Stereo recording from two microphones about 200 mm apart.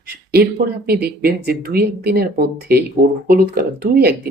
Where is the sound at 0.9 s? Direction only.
50° right (ahead or behind).